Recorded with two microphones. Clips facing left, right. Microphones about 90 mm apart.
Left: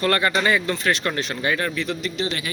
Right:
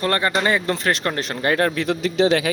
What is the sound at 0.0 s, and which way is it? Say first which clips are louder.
Speech: even; 25° right (ahead or behind).